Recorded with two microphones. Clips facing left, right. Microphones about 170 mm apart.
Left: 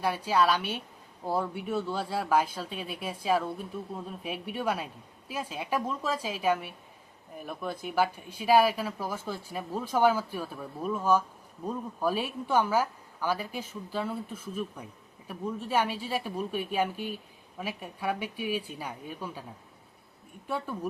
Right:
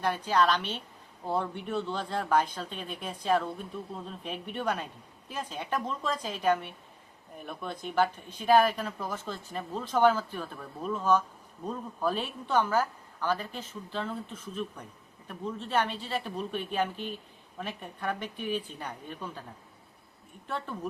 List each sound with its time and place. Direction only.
0.0 s a woman's voice: 10° left (ahead or behind)
20.5 s a woman's voice: 10° left (ahead or behind)